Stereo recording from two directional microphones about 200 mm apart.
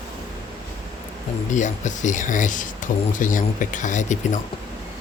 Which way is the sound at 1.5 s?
35° left (ahead or behind).